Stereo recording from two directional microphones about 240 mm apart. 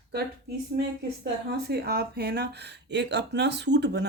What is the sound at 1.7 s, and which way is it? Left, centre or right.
Speech, right.